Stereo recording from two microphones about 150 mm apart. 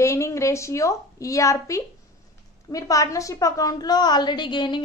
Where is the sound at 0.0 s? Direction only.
20° left (ahead or behind).